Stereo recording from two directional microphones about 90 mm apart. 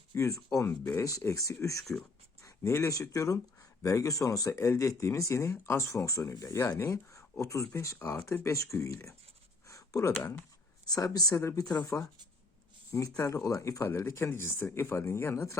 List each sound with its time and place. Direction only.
0.1 s speech: 35° left (ahead or behind)
1.8 s speech: 5° left (ahead or behind)
2.4 s speech: 35° left (ahead or behind)
9.6 s a sound: 35° left (ahead or behind)
10.8 s speech: 45° left (ahead or behind)
11.3 s speech: 30° left (ahead or behind)